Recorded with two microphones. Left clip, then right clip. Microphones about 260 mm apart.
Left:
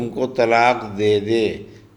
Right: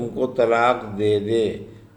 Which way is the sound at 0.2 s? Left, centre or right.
Left.